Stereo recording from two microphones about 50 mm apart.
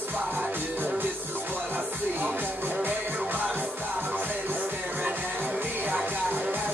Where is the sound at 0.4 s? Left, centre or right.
Right.